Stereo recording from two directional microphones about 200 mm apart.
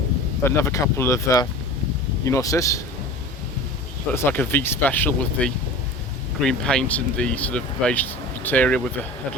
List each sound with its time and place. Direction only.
0.4 s speech: 15° left (ahead or behind)
4.1 s speech: 10° left (ahead or behind)